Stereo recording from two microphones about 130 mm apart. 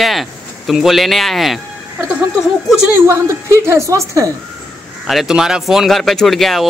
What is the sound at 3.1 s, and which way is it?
A woman's voice, 20° right (ahead or behind).